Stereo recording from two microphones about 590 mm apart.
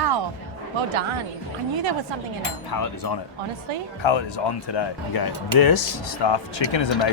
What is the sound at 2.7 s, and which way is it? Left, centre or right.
Speech, left.